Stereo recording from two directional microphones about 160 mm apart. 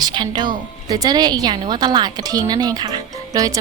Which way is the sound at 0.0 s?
25° right (ahead or behind).